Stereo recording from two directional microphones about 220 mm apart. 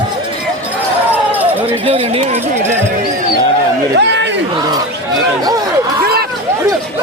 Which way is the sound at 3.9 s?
50° right (ahead or behind).